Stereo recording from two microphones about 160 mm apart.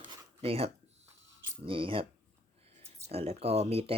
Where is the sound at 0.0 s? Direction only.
35° right (ahead or behind).